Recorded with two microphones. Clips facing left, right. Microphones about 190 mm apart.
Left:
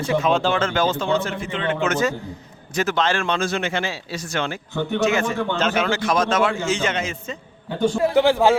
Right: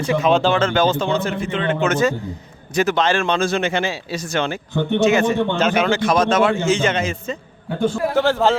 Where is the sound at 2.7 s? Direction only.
15° right (ahead or behind); by 7.3 s 35° right (ahead or behind).